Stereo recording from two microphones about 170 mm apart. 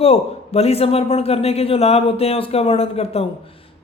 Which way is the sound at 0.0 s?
35° left (ahead or behind).